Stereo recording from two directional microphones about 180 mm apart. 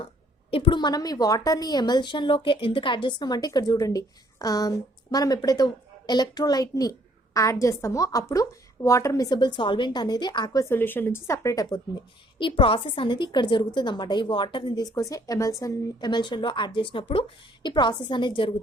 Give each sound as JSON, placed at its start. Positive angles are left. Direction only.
{"t": 0.5, "sound": "a woman's voice", "side_deg": 30}